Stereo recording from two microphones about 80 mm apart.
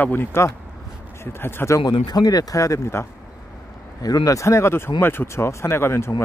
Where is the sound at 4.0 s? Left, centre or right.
Left.